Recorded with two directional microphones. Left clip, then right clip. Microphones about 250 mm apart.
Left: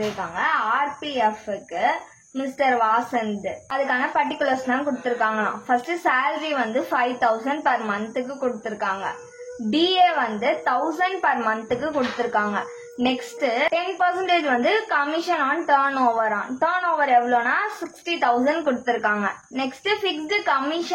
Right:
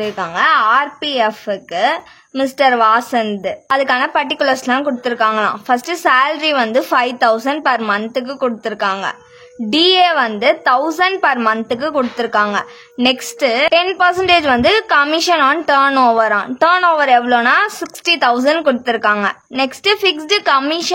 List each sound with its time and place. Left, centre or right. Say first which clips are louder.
0.4 s a woman's voice: right 10 dB; right
2.3 s a woman's voice: right 8 dB; right